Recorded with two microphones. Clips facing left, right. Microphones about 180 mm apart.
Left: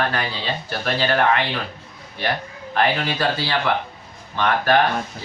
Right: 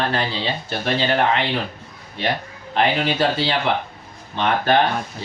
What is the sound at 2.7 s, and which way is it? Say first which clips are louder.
Speech: right 2 dB; 25° right (ahead or behind).